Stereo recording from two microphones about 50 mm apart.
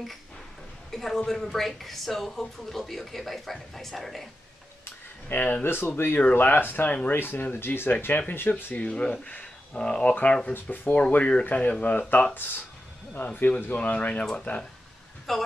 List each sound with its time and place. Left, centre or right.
0.9 s a woman's voice: centre
5.3 s speech: left
8.7 s speech: left
10.5 s speech: left
10.9 s speech: left
13.7 s speech: left
15.3 s a woman's voice: centre